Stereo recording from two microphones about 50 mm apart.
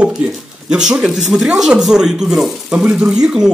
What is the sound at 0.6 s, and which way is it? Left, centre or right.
Speech, centre.